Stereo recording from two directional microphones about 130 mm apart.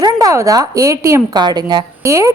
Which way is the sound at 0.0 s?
25° right (ahead or behind).